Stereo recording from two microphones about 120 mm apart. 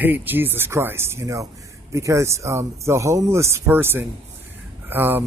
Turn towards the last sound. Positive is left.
turn(degrees=-15)  # may be behind; listen again after turning